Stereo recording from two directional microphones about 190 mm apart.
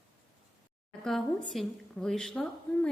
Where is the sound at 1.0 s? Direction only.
Centre (ahead or behind).